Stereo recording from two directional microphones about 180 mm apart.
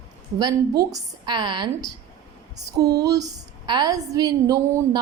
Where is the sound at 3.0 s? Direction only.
20° right (ahead or behind).